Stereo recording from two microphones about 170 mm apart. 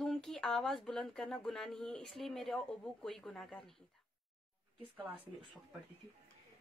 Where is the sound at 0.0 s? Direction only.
Centre (ahead or behind).